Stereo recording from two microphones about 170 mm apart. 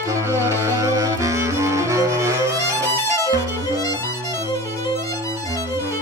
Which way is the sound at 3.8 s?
20° left (ahead or behind).